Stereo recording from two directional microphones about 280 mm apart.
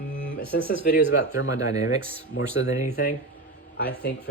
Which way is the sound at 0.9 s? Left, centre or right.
Left.